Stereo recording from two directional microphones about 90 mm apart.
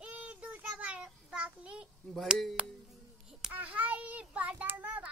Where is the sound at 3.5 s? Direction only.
15° right (ahead or behind).